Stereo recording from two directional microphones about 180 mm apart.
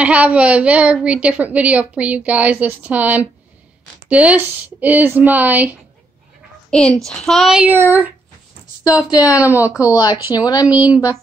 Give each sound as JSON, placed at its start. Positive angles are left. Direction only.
{"t": 0.0, "sound": "a woman's voice", "side_deg": -5}
{"t": 6.7, "sound": "speech", "side_deg": 5}
{"t": 8.8, "sound": "a woman's voice", "side_deg": 20}
{"t": 9.2, "sound": "a woman's voice", "side_deg": -10}
{"t": 9.8, "sound": "a woman's voice", "side_deg": 20}
{"t": 10.7, "sound": "a woman's voice", "side_deg": -10}